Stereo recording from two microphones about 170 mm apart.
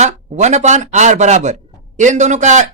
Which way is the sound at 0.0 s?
45° right (ahead or behind).